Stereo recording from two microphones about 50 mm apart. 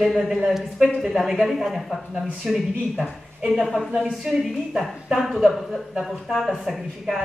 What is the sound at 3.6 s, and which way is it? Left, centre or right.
Speech, centre.